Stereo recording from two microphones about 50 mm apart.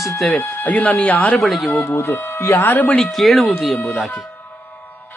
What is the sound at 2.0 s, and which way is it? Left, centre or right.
Speech, left.